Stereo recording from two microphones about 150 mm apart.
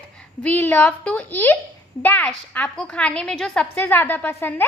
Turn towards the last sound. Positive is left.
turn(degrees=15)  # may be behind; listen again after turning